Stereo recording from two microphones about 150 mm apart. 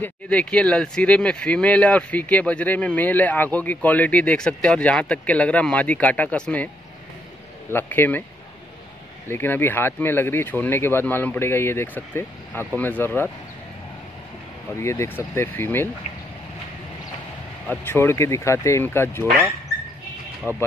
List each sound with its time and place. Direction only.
0.0 s speech: 10° left (ahead or behind)
7.7 s speech: 15° left (ahead or behind)
9.3 s speech: 15° left (ahead or behind)
14.8 s speech: 20° left (ahead or behind)
17.6 s speech: 15° left (ahead or behind)
20.5 s speech: 15° right (ahead or behind)